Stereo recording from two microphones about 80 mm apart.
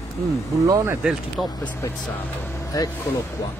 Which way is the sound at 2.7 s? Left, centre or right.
Left.